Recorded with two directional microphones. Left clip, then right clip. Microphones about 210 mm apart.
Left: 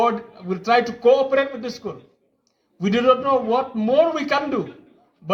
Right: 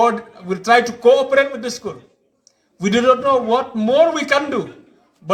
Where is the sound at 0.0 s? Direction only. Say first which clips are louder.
Right 4 dB; 20° right (ahead or behind).